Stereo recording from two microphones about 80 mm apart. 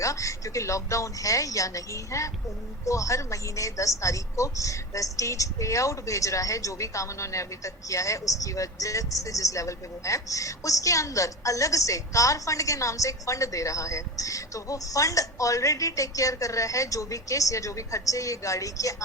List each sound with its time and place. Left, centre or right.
0.0 s a woman's voice: left